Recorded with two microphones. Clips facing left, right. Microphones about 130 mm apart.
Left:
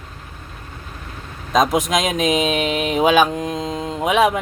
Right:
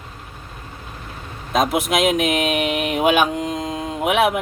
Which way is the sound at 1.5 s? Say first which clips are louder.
Left 2 dB; 10° right (ahead or behind).